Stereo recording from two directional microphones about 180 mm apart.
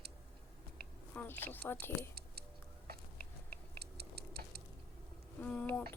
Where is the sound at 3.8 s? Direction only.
65° right (ahead or behind).